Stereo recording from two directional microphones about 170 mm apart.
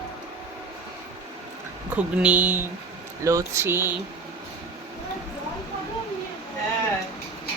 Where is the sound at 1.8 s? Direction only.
5° right (ahead or behind).